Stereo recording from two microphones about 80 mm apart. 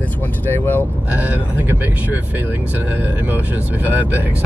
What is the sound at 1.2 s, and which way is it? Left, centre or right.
Speech, right.